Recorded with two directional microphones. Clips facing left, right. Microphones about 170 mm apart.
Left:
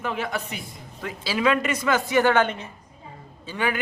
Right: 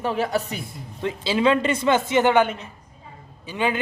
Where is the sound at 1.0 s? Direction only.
25° right (ahead or behind).